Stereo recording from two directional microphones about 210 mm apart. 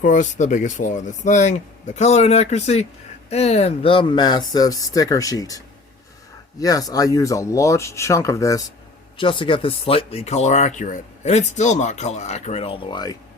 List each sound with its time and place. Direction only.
0.0 s speech: 35° left (ahead or behind); by 13.1 s 20° left (ahead or behind)